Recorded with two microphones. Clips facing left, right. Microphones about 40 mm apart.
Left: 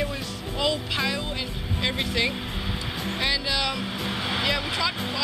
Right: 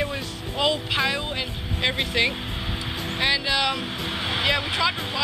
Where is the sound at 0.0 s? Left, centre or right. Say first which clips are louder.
Right 1 dB; right.